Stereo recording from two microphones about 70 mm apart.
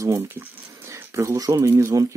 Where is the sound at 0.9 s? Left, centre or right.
Right.